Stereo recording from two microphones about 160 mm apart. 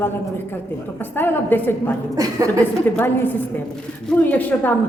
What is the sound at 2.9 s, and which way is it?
A woman's voice, 10° left (ahead or behind).